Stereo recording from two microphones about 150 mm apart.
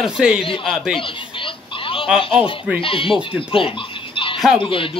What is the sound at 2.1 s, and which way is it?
Speech, 35° left (ahead or behind).